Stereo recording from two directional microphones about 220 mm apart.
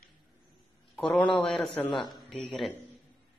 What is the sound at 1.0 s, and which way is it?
A man's voice, 5° left (ahead or behind).